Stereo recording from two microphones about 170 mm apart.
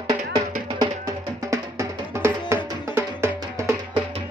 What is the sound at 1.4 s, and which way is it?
Music, 15° right (ahead or behind).